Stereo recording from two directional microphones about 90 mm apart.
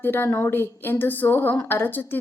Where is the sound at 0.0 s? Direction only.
25° left (ahead or behind).